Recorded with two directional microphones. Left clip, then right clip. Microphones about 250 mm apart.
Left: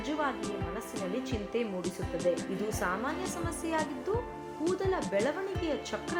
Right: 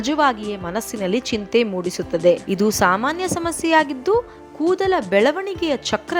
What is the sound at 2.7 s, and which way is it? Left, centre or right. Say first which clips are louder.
A woman's voice: right 15 dB; right.